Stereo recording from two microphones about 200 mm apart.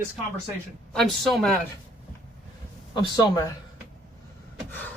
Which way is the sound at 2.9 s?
20° left (ahead or behind).